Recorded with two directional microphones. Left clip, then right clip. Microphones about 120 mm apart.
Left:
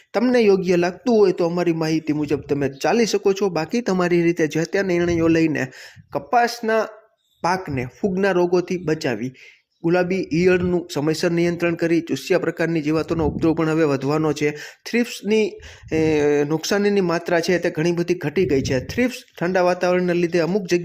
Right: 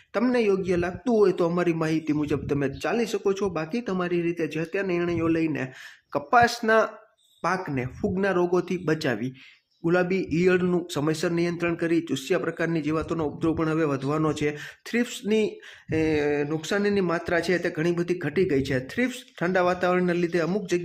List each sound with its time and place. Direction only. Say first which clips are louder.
0.1 s speech: left 7 dB; 25° left (ahead or behind)
1.1 s speech: left 4 dB; 20° left (ahead or behind)
2.8 s speech: left 9 dB; 40° left (ahead or behind)
3.9 s speech: left 8 dB; 55° left (ahead or behind)
6.1 s speech: left 1 dB; 10° left (ahead or behind)
7.4 s speech: left 5 dB; 30° left (ahead or behind)